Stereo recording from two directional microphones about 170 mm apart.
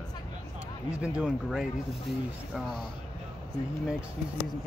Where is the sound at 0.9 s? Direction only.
5° right (ahead or behind).